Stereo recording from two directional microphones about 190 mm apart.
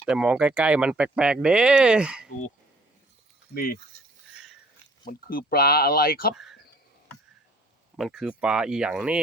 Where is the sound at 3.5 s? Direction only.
50° left (ahead or behind).